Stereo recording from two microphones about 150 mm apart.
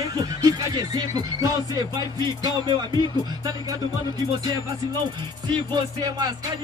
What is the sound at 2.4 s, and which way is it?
Music, 30° right (ahead or behind).